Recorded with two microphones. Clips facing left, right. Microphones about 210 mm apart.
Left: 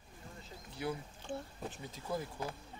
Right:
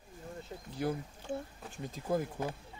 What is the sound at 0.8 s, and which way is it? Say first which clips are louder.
Speech: right 4 dB; 45° right (ahead or behind).